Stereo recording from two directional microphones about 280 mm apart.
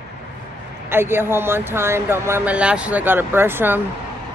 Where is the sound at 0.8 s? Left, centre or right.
Centre.